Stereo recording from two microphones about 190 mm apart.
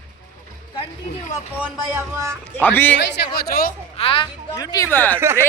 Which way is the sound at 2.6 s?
10° left (ahead or behind).